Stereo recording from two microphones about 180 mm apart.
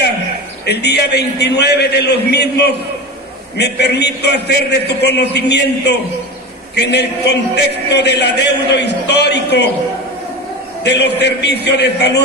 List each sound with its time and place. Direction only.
0.7 s a man's voice: 65° left (ahead or behind)
10.8 s a man's voice: 70° left (ahead or behind)